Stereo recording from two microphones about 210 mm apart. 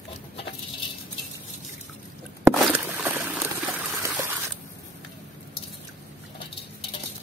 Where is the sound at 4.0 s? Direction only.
10° right (ahead or behind).